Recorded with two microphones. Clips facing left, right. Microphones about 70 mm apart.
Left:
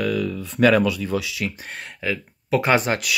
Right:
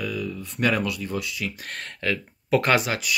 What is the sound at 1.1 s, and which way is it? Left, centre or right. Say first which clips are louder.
Speech: left 4 dB; left.